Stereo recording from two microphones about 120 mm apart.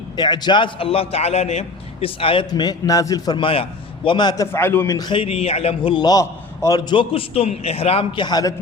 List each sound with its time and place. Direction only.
0.2 s a man's voice: 40° left (ahead or behind)
2.5 s a man's voice: 35° left (ahead or behind)
3.3 s a man's voice: 50° left (ahead or behind)
4.5 s a man's voice: 20° left (ahead or behind)
4.9 s a man's voice: 40° left (ahead or behind); by 5.9 s 55° left (ahead or behind)
5.9 s a man's voice: 35° left (ahead or behind)